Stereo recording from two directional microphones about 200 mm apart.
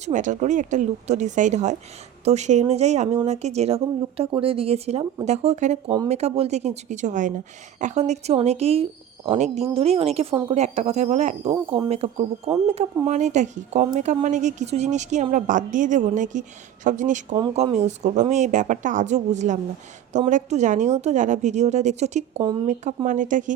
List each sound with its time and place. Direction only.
0.0 s a woman's voice: 40° right (ahead or behind)
11.5 s speech: 20° right (ahead or behind)
11.9 s a woman's voice: 30° right (ahead or behind)